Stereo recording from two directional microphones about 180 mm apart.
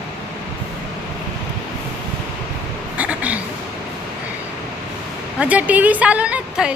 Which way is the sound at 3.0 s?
10° right (ahead or behind).